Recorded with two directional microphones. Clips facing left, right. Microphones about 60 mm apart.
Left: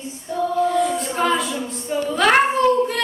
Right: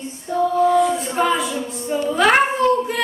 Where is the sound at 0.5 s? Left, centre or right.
Centre.